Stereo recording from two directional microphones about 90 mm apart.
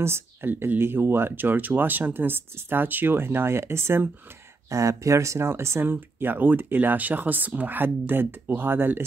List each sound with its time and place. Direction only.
0.0 s speech: 25° right (ahead or behind)